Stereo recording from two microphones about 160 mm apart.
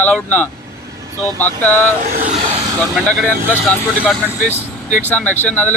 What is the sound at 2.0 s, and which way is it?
Speech, 60° right (ahead or behind).